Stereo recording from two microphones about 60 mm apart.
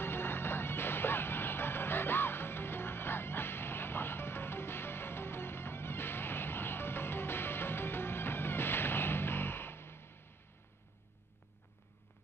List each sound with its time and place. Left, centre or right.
0.0 s music: left